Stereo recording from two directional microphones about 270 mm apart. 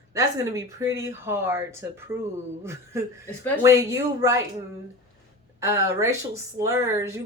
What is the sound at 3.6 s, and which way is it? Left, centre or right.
Speech, centre.